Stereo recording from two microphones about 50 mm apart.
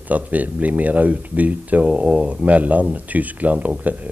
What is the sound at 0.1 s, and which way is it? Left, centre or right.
Speech, right.